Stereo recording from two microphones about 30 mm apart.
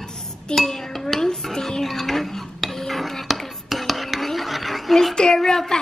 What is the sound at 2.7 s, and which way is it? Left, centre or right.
Dishes, centre.